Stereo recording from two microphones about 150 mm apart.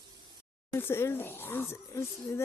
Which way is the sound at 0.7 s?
15° left (ahead or behind).